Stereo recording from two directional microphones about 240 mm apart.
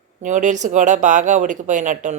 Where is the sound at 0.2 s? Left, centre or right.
Right.